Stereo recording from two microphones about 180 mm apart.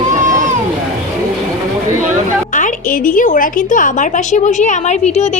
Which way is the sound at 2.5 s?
45° left (ahead or behind).